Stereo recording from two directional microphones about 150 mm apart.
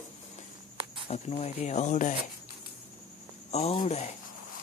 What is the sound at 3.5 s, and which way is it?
Speech, 45° left (ahead or behind).